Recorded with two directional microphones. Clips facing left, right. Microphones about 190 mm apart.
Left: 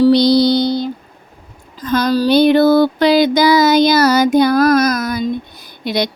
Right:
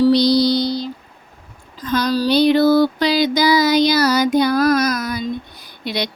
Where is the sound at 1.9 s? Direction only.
50° left (ahead or behind).